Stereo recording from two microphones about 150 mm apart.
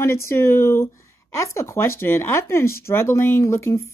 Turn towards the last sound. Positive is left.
turn(degrees=20)  # may be behind; listen again after turning